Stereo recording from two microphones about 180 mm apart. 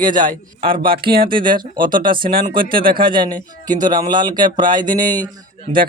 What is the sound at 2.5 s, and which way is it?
Speech, 30° right (ahead or behind).